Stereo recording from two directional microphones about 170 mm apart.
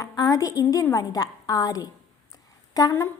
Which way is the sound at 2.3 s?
20° left (ahead or behind).